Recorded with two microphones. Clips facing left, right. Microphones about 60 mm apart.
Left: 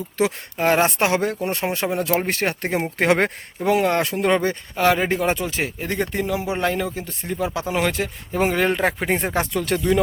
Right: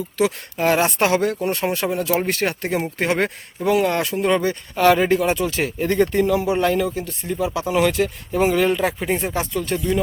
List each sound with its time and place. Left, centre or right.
0.2 s speech: left
0.9 s speech: centre
1.4 s speech: centre
2.0 s speech: left
3.0 s speech: left
3.7 s speech: left
4.8 s speech: centre
6.5 s speech: left
6.8 s speech: left
9.6 s speech: left